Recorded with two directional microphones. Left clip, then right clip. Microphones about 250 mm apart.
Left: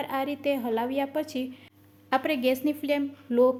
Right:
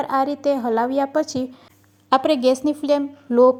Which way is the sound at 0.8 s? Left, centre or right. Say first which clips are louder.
Right 9 dB; centre.